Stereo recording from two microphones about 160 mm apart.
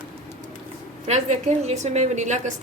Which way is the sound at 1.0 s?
45° right (ahead or behind).